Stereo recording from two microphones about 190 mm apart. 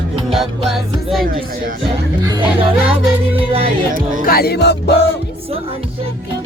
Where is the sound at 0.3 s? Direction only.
Centre (ahead or behind).